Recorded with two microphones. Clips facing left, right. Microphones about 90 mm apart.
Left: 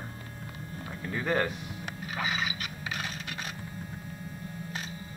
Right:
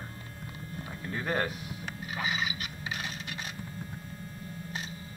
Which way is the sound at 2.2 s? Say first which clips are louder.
Left 1 dB; 35° left (ahead or behind).